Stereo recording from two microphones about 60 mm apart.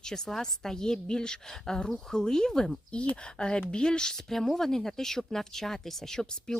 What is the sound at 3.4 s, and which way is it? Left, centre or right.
A woman's voice, centre.